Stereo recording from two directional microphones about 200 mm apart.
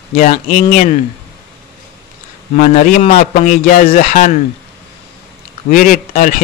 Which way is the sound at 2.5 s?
40° left (ahead or behind).